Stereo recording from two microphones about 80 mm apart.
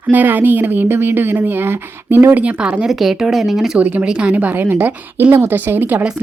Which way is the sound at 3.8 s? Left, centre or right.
Centre.